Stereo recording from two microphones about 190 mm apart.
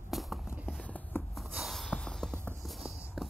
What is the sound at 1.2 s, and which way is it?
Writing, centre (ahead or behind).